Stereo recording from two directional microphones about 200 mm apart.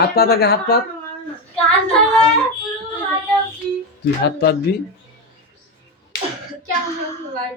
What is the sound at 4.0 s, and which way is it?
Speech, 55° left (ahead or behind).